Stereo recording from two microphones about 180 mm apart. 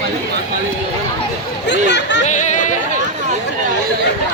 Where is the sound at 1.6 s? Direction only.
75° left (ahead or behind).